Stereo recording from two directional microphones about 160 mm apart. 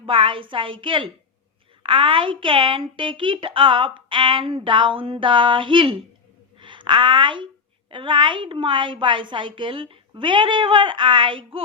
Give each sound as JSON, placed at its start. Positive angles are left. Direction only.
{"t": 0.0, "sound": "a woman's voice", "side_deg": -30}